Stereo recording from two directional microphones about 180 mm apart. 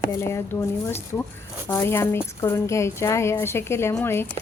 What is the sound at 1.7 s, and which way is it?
Speech, 15° left (ahead or behind).